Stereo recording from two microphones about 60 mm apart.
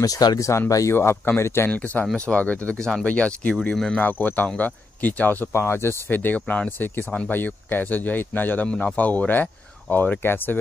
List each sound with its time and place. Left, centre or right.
0.0 s speech: left
0.5 s speech: left
1.0 s speech: left
1.7 s speech: left
2.8 s speech: centre
3.7 s speech: centre
4.0 s speech: left
5.5 s speech: left
6.0 s speech: left